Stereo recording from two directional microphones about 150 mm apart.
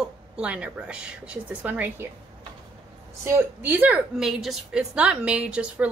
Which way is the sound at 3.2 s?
15° right (ahead or behind).